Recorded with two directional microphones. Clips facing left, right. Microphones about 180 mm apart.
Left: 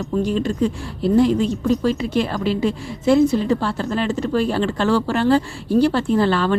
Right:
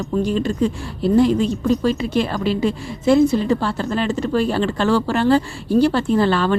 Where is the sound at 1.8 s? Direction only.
30° right (ahead or behind).